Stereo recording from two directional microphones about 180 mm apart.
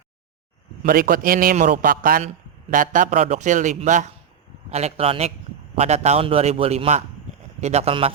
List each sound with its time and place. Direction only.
0.8 s a man's voice: 50° right (ahead or behind); by 8.1 s 35° right (ahead or behind)